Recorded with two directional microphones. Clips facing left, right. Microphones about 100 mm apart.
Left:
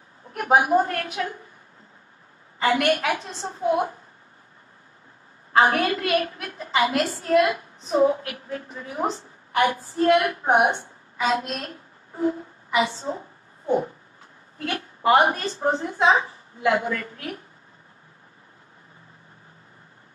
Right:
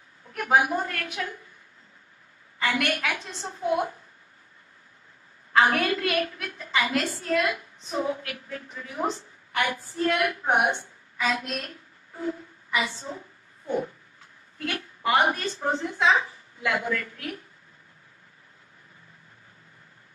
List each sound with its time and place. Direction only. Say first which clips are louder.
0.3 s a woman's voice: left 4 dB; 30° left (ahead or behind)
2.6 s a woman's voice: left 6 dB; 35° left (ahead or behind)
5.5 s a woman's voice: left 2 dB; 30° left (ahead or behind)
14.6 s a woman's voice: left 4 dB; 35° left (ahead or behind)